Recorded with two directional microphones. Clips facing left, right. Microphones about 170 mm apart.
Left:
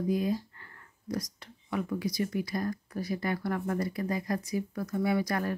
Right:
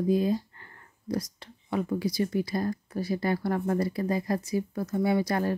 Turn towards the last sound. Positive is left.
turn(degrees=-25)  # may be behind; listen again after turning